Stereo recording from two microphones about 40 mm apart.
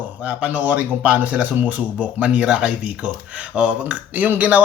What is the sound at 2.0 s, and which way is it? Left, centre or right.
A man's voice, right.